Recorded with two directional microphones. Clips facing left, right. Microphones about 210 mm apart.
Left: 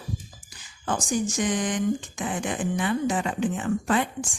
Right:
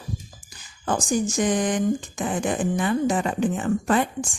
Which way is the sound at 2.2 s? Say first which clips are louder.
Right 4 dB; 40° right (ahead or behind).